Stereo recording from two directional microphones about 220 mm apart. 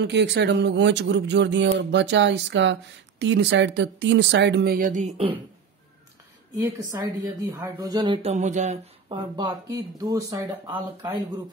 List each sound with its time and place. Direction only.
0.0 s speech: 50° right (ahead or behind); by 5.4 s 25° right (ahead or behind)
6.5 s speech: 15° right (ahead or behind); by 9.2 s 30° right (ahead or behind)
9.4 s speech: 20° right (ahead or behind)